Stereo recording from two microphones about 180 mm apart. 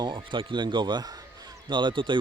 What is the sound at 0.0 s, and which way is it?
Speech, 25° right (ahead or behind).